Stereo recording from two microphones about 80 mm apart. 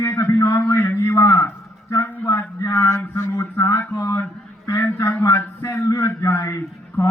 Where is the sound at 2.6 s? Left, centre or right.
Left.